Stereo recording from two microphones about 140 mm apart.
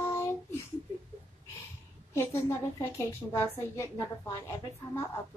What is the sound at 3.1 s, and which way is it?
Speech, 20° left (ahead or behind).